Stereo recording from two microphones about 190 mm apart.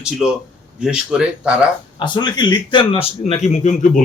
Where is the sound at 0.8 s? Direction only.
5° right (ahead or behind).